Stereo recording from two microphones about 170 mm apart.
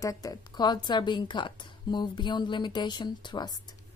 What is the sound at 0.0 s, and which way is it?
A woman's voice, 20° left (ahead or behind).